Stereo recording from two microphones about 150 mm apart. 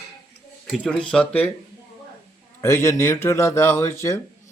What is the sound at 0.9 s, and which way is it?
Speech, 5° left (ahead or behind).